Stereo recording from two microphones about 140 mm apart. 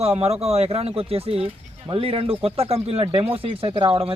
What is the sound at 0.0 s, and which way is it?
Speech, 50° right (ahead or behind).